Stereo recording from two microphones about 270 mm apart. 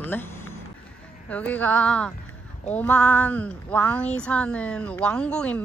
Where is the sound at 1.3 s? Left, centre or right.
Centre.